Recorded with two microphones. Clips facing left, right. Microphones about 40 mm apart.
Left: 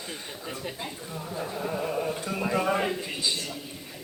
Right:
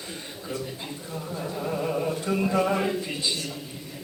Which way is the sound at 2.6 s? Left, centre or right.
Centre.